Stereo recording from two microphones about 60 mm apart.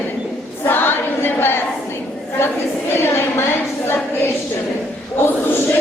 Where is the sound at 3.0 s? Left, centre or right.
Left.